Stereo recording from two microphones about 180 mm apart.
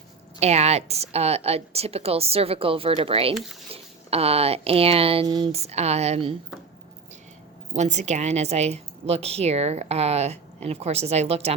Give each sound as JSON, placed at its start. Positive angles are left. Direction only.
{"t": 0.3, "sound": "speech", "side_deg": -35}
{"t": 3.3, "sound": "speech", "side_deg": 0}
{"t": 3.7, "sound": "speech", "side_deg": -35}
{"t": 7.7, "sound": "speech", "side_deg": -40}